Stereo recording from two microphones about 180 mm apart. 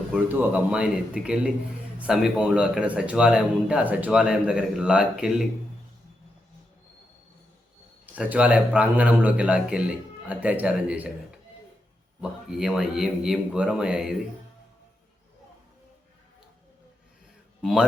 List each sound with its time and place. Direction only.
0.3 s a man's voice: 5° right (ahead or behind)
8.1 s a man's voice: 10° right (ahead or behind)
17.6 s a man's voice: centre (ahead or behind)